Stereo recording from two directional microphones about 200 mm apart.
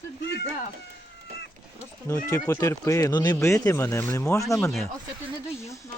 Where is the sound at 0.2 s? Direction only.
60° left (ahead or behind).